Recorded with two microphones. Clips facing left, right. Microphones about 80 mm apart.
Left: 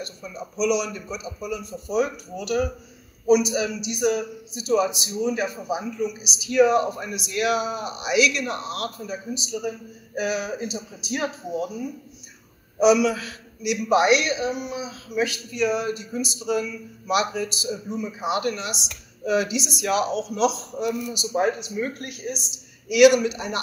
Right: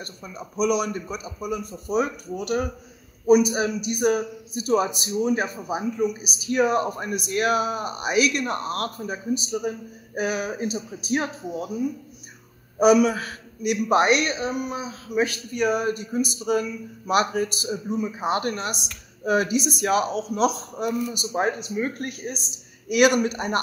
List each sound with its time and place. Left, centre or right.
0.0 s a man's voice: right
12.7 s a man's voice: right